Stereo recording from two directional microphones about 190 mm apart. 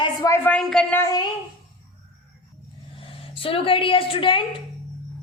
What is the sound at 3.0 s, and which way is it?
A woman's voice, 30° left (ahead or behind).